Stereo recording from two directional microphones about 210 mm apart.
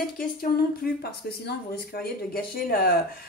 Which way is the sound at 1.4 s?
45° left (ahead or behind).